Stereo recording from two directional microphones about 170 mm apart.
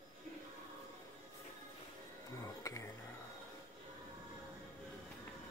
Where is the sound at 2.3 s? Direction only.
20° left (ahead or behind).